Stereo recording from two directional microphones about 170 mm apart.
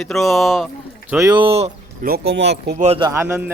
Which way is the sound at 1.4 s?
35° right (ahead or behind).